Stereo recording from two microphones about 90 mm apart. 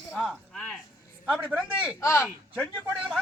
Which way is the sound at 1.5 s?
15° right (ahead or behind).